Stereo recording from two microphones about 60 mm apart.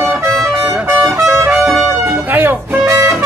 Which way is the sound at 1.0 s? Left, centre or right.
Right.